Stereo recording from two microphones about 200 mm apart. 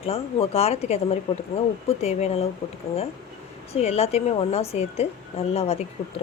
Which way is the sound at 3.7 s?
30° left (ahead or behind).